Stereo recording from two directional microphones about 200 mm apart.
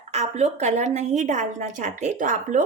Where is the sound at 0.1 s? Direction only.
35° right (ahead or behind).